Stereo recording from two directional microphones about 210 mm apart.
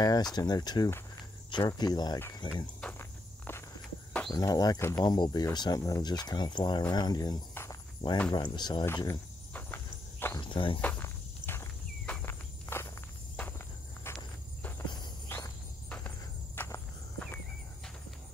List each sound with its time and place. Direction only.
0.0 s speech: 20° left (ahead or behind)
1.5 s cricket: 20° left (ahead or behind)
4.3 s speech: 20° left (ahead or behind)
9.5 s walk: 10° left (ahead or behind)
10.2 s cricket: 20° left (ahead or behind)
10.8 s walk: 10° left (ahead or behind)
14.0 s walk: 10° left (ahead or behind)